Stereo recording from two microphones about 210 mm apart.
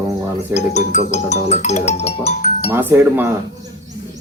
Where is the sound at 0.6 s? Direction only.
35° left (ahead or behind).